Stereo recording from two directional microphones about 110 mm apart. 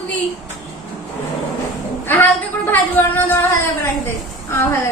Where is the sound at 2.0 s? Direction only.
15° left (ahead or behind).